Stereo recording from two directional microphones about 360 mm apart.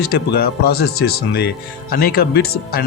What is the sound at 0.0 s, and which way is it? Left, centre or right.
Speech, left.